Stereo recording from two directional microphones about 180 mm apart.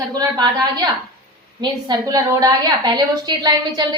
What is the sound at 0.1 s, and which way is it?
Speech, 20° right (ahead or behind).